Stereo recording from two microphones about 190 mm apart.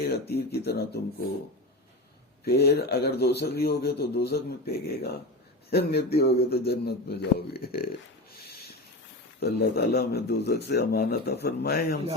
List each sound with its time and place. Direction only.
0.0 s speech: 55° left (ahead or behind)
2.4 s speech: 55° left (ahead or behind)
5.7 s speech: 55° left (ahead or behind)
8.3 s a sound: 55° left (ahead or behind)
9.4 s speech: 60° left (ahead or behind)